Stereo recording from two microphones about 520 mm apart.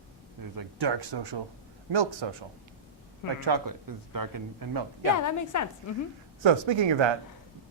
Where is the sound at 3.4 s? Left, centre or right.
Right.